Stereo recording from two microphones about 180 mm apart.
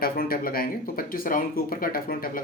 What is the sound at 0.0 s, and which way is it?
Speech, 55° left (ahead or behind).